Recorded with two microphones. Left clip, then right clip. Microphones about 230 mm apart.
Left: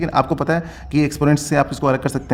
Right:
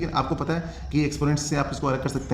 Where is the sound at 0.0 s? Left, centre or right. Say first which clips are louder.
Left 8 dB; left.